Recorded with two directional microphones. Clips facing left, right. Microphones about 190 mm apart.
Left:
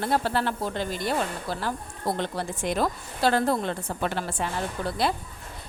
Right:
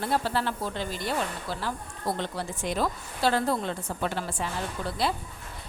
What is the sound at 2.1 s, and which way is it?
A woman's voice, 60° left (ahead or behind).